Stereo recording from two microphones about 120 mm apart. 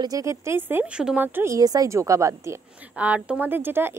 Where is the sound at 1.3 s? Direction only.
25° right (ahead or behind).